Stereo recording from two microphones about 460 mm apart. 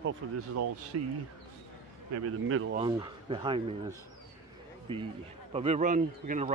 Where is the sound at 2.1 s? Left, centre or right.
Right.